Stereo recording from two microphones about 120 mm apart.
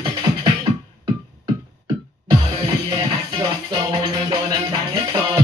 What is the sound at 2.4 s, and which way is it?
Music, 40° right (ahead or behind).